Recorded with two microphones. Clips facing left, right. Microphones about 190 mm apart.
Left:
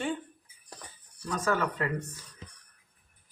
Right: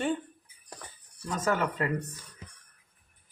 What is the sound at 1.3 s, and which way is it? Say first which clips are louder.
Speech: even; 20° right (ahead or behind).